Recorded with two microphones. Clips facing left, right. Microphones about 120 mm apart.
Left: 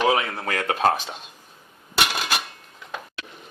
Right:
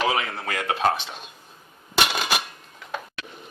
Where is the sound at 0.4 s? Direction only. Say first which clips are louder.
Left 1 dB; 40° left (ahead or behind).